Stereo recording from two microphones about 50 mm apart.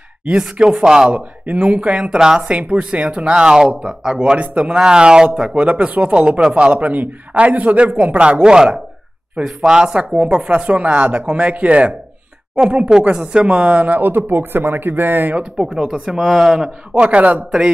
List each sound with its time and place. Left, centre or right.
0.2 s a man's voice: centre
1.1 s a man's voice: right
2.1 s a man's voice: centre
2.7 s a man's voice: right
9.9 s a man's voice: right
15.5 s a man's voice: centre
16.2 s speech: centre
16.9 s a man's voice: right